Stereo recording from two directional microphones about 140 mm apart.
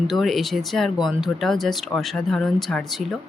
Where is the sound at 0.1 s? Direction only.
Centre (ahead or behind).